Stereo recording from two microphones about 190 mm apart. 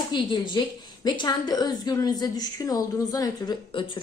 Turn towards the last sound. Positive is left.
turn(degrees=25)  # may be behind; listen again after turning